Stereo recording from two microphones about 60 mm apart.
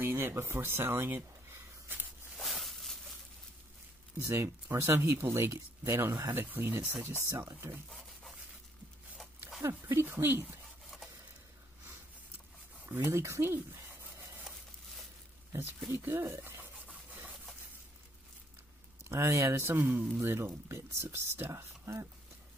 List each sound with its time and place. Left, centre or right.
0.0 s a sound: right
2.3 s a sound: centre
4.2 s speech: right
9.8 s speech: right
12.8 s speech: right
15.9 s speech: right
16.8 s rub: right
19.0 s speech: right
20.3 s speech: right